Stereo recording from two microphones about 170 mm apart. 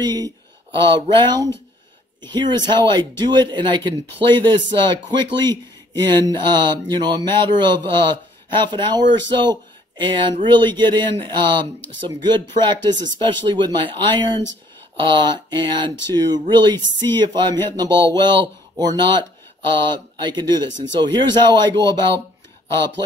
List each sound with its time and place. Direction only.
0.0 s speech: 25° right (ahead or behind)